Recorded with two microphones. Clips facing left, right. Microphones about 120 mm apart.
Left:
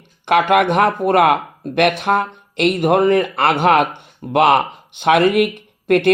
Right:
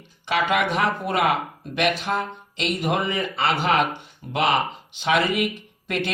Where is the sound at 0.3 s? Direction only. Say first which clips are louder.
Left 8 dB; 60° left (ahead or behind).